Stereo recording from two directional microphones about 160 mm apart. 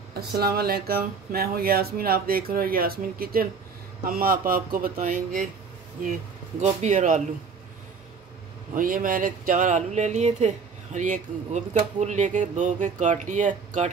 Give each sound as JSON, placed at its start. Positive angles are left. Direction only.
{"t": 0.1, "sound": "speech", "side_deg": -75}
{"t": 6.6, "sound": "speech", "side_deg": -45}
{"t": 8.7, "sound": "speech", "side_deg": -60}